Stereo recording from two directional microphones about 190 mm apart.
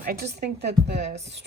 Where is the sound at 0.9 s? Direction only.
35° right (ahead or behind).